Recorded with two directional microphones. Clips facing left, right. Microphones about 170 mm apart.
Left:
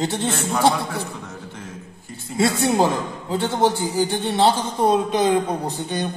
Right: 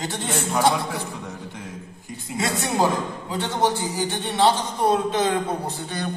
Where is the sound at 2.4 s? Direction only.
30° left (ahead or behind).